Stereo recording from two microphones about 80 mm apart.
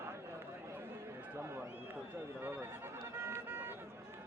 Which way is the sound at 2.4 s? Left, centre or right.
Right.